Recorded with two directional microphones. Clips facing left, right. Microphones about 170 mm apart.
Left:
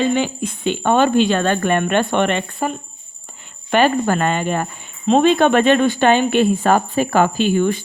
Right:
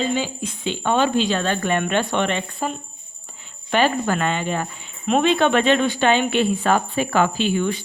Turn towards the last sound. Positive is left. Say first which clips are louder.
# left 5 dB
turn(degrees=45)  # may be behind; listen again after turning